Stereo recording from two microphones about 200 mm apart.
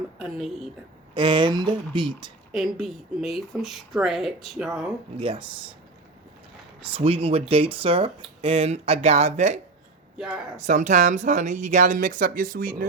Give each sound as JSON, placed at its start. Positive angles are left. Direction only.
{"t": 0.2, "sound": "speech", "side_deg": 0}
{"t": 1.1, "sound": "speech", "side_deg": -25}
{"t": 2.5, "sound": "speech", "side_deg": 0}
{"t": 5.1, "sound": "speech", "side_deg": -25}
{"t": 6.8, "sound": "speech", "side_deg": -25}
{"t": 10.2, "sound": "speech", "side_deg": 0}
{"t": 10.6, "sound": "speech", "side_deg": -35}